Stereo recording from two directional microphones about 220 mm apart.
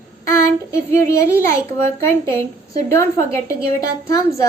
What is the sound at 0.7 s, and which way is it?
A woman's voice, 10° left (ahead or behind).